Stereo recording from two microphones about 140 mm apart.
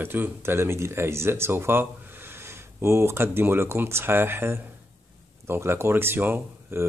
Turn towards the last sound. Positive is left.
turn(degrees=-15)  # may be behind; listen again after turning